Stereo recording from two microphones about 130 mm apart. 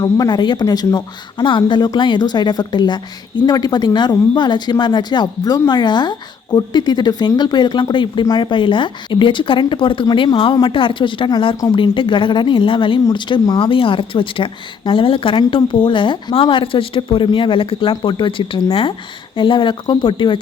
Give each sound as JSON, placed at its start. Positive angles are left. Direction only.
{"t": 0.0, "sound": "speech", "side_deg": 30}